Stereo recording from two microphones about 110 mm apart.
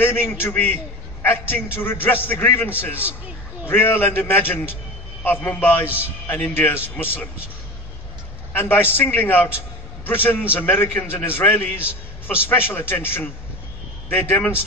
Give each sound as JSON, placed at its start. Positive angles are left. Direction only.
{"t": 0.0, "sound": "a man's voice", "side_deg": 20}
{"t": 8.5, "sound": "a man's voice", "side_deg": 15}